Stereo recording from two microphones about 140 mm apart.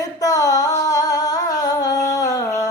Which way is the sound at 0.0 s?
25° left (ahead or behind).